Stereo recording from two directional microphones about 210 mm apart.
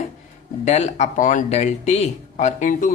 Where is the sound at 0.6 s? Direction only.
35° left (ahead or behind).